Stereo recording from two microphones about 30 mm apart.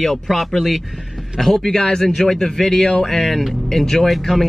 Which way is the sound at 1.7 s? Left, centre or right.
Centre.